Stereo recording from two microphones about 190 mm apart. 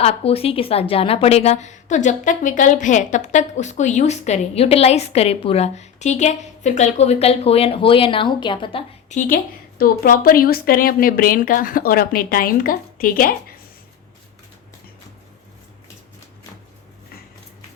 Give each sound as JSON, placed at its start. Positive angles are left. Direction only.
{"t": 0.0, "sound": "a woman's voice", "side_deg": 30}
{"t": 9.0, "sound": "a woman's voice", "side_deg": 45}